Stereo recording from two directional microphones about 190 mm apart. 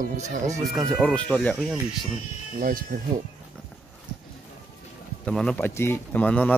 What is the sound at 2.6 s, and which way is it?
Speech, 45° right (ahead or behind).